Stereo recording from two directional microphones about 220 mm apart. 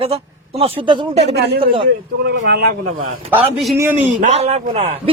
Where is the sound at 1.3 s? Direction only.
50° right (ahead or behind).